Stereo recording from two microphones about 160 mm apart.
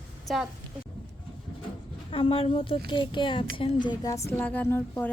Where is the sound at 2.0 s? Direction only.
35° left (ahead or behind).